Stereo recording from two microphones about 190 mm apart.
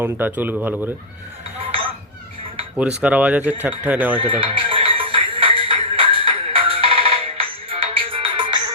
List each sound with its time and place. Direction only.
0.0 s speech: 10° right (ahead or behind)
1.5 s a sound: 30° right (ahead or behind)
3.0 s speech: 5° right (ahead or behind)
4.2 s music: 30° right (ahead or behind)